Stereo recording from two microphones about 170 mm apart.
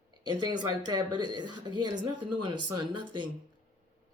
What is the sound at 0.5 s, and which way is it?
A woman's voice, 25° right (ahead or behind).